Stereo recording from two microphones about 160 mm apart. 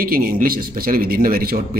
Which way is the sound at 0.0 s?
60° right (ahead or behind).